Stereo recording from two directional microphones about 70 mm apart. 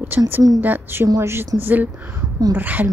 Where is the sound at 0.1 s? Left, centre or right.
Right.